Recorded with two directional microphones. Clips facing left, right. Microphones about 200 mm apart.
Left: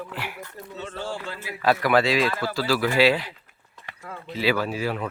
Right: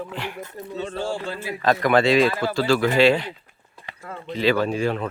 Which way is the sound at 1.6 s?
5° left (ahead or behind).